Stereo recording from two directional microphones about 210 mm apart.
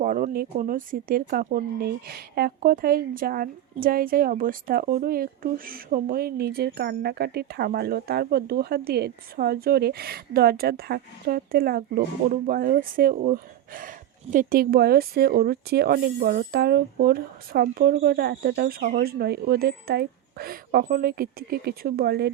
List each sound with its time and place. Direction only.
0.0 s speech: 40° right (ahead or behind)